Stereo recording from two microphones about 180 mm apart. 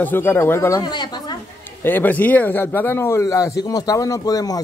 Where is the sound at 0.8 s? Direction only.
25° left (ahead or behind).